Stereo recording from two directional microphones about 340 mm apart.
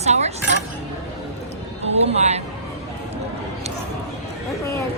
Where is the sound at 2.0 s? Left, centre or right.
Centre.